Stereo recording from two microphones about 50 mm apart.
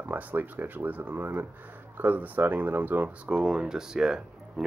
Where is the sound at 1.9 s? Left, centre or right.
Right.